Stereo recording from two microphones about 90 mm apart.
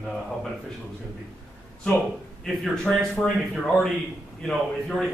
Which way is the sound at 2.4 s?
5° left (ahead or behind).